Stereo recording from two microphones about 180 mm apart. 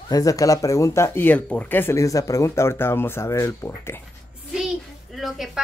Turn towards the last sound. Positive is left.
turn(degrees=0)  # may be behind; listen again after turning